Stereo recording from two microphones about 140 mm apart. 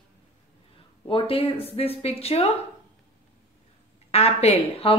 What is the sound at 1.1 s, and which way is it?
A woman's voice, 40° left (ahead or behind).